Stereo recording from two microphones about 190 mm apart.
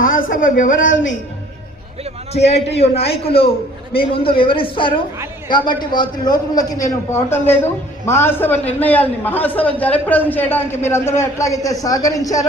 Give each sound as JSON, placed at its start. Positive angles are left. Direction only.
{"t": 0.0, "sound": "a woman's voice", "side_deg": 45}
{"t": 2.7, "sound": "a man's voice", "side_deg": 30}